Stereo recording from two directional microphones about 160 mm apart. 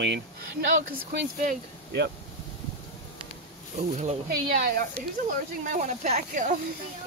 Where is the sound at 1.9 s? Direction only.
90° right.